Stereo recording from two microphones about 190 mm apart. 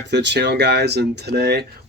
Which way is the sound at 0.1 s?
65° right (ahead or behind).